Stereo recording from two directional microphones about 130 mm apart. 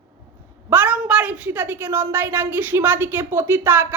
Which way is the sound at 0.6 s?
15° right (ahead or behind).